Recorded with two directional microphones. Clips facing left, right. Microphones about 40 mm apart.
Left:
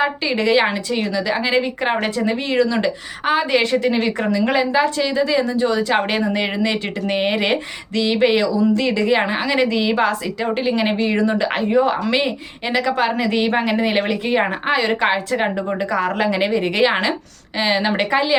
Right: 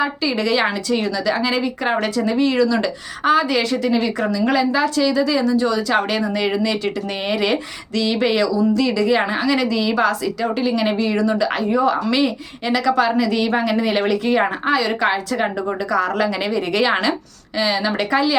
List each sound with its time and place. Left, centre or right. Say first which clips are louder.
0.0 s a woman's voice: left 1 dB; left
17.6 s speech: left 1 dB; left